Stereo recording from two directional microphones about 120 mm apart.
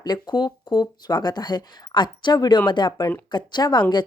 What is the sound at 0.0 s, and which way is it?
Speech, 35° left (ahead or behind).